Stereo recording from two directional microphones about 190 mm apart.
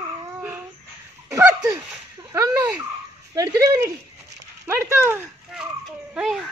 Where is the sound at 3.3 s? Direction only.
15° right (ahead or behind).